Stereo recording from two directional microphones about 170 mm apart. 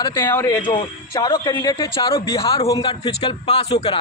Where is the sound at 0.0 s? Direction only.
15° left (ahead or behind).